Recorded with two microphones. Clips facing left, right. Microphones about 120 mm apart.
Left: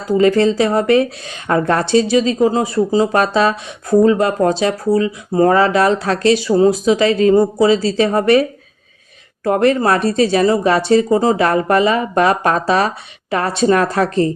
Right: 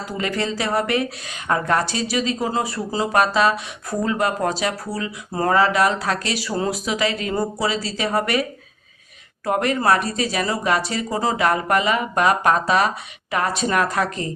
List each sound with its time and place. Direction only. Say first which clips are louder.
0.1 s a woman's voice: left 14 dB; 25° left (ahead or behind)